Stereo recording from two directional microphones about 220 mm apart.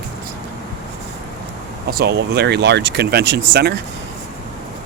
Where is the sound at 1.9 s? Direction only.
45° right (ahead or behind).